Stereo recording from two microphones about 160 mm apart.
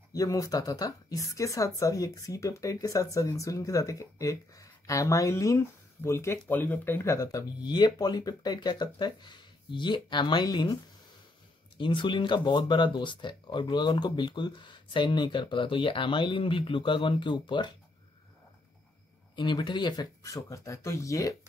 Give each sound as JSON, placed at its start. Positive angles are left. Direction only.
{"t": 0.1, "sound": "a woman's voice", "side_deg": 20}
{"t": 19.3, "sound": "a woman's voice", "side_deg": 30}